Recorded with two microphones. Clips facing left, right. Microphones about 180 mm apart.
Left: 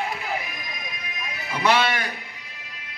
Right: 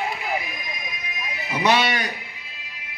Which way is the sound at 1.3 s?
20° right (ahead or behind).